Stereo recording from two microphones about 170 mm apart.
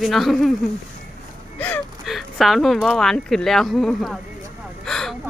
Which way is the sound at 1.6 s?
10° left (ahead or behind).